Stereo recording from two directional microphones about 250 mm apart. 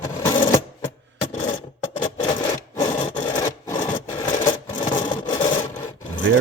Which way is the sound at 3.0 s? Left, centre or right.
Left.